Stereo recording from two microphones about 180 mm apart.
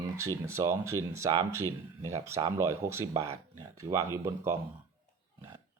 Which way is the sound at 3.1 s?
25° right (ahead or behind).